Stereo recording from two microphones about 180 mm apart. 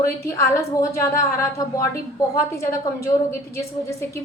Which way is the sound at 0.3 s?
15° left (ahead or behind).